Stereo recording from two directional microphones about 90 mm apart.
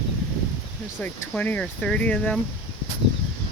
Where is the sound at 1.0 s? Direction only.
20° left (ahead or behind).